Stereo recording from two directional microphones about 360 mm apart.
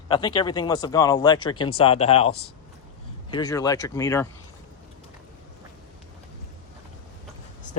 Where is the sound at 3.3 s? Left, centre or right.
Centre.